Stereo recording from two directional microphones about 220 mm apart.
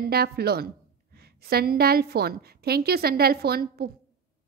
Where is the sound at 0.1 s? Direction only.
45° right (ahead or behind).